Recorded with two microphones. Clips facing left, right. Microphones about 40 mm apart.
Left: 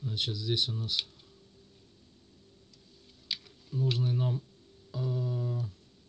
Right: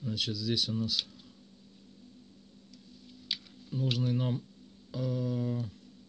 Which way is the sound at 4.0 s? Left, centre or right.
Right.